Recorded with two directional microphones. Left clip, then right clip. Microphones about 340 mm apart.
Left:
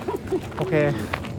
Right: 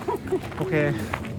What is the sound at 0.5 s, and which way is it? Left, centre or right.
Speech, centre.